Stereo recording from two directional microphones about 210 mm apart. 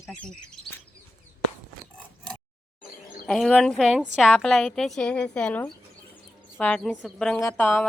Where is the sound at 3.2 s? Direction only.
Centre (ahead or behind).